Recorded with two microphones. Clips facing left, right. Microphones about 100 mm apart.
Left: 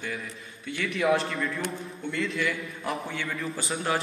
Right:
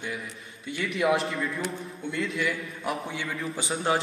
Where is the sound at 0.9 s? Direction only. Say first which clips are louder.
Even; centre (ahead or behind).